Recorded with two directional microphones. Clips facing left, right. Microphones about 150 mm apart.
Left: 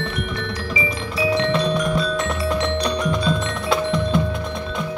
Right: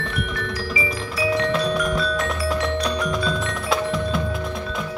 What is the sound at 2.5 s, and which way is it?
Music, centre (ahead or behind).